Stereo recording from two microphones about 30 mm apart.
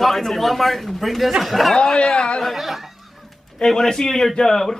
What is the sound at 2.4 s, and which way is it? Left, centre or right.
Speech, centre.